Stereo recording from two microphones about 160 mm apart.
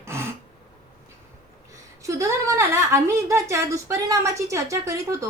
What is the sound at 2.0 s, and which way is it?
A woman's voice, 20° right (ahead or behind).